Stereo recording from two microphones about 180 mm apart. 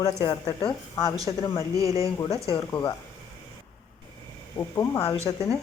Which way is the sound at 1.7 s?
20° right (ahead or behind).